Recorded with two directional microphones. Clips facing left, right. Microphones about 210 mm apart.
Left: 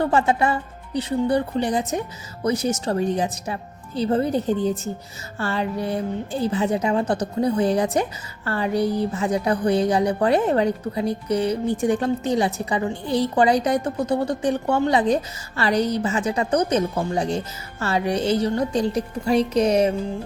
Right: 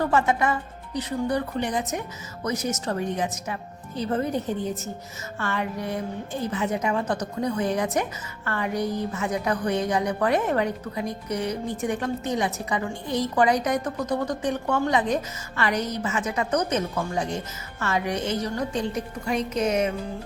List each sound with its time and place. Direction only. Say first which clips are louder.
0.0 s a woman's voice: left 3 dB; 30° left (ahead or behind)